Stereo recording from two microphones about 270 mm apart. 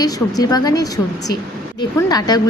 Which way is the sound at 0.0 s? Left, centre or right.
Centre.